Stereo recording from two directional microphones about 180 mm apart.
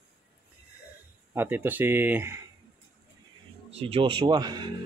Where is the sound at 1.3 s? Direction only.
10° right (ahead or behind).